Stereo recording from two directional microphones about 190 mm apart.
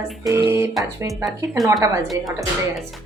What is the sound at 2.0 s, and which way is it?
Speech, centre (ahead or behind).